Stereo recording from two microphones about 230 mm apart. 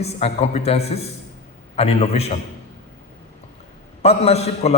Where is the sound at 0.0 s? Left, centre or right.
Left.